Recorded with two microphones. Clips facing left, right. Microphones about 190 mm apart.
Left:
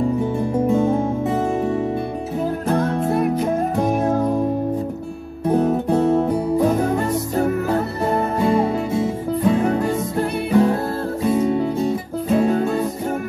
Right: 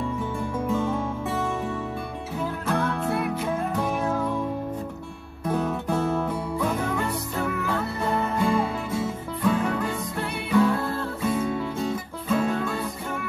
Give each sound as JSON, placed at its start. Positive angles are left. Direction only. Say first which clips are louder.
{"t": 0.2, "sound": "music", "louder": "left 9 dB", "side_deg": 40}
{"t": 2.7, "sound": "music", "louder": "left 6 dB", "side_deg": 40}
{"t": 5.5, "sound": "music", "louder": "left 8 dB", "side_deg": 40}
{"t": 8.9, "sound": "music", "louder": "left 8 dB", "side_deg": 20}
{"t": 9.6, "sound": "music", "louder": "left 7 dB", "side_deg": 40}
{"t": 11.2, "sound": "music", "louder": "left 8 dB", "side_deg": 20}
{"t": 12.3, "sound": "music", "louder": "left 7 dB", "side_deg": 35}